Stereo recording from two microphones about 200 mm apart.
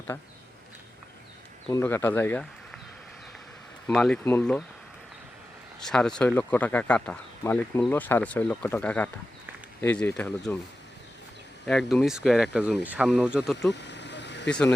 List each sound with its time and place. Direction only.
1.7 s speech: 10° left (ahead or behind)
3.8 s speech: 5° left (ahead or behind)
5.8 s speech: 5° left (ahead or behind)
11.6 s speech: centre (ahead or behind)
13.7 s vehicle: 60° left (ahead or behind)